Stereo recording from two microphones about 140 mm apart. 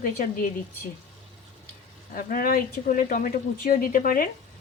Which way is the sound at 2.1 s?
90° left.